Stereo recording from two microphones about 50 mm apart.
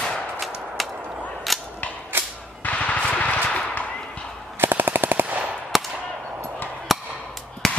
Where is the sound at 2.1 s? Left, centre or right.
Right.